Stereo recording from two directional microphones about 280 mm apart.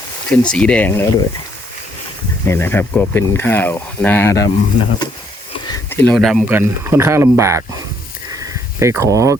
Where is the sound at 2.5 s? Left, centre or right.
Centre.